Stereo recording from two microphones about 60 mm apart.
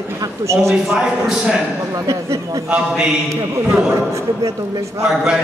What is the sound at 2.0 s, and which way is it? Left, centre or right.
Speech, right.